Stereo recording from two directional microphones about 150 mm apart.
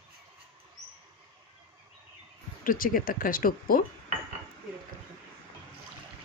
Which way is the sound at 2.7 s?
70° left (ahead or behind).